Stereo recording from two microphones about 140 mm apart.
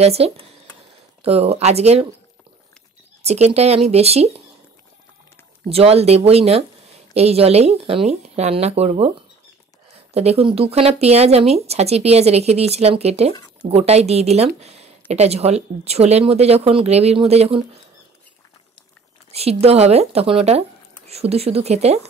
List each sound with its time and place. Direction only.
0.0 s speech: 45° right (ahead or behind)
3.3 s speech: 50° right (ahead or behind)
5.7 s speech: 45° right (ahead or behind)
10.1 s speech: 45° right (ahead or behind)
19.3 s speech: 45° right (ahead or behind)